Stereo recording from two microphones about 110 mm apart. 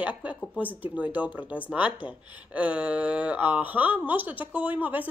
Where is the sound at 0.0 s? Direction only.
15° right (ahead or behind).